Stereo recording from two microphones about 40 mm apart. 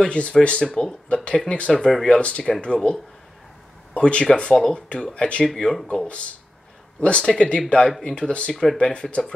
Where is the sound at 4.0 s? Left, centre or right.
Left.